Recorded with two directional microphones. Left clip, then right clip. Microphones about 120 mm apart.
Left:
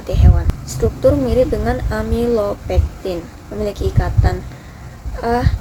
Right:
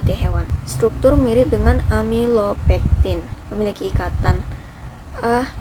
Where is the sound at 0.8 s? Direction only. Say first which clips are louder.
Right 2 dB; 20° right (ahead or behind).